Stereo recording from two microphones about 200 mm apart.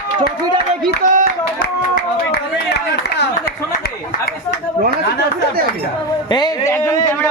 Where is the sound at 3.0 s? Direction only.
60° left (ahead or behind).